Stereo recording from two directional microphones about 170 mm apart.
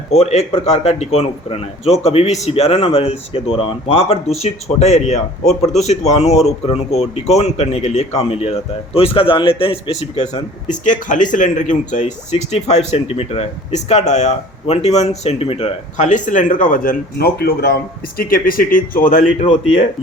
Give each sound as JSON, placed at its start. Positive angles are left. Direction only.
{"t": 0.1, "sound": "a man's voice", "side_deg": 40}
{"t": 10.7, "sound": "speech", "side_deg": 50}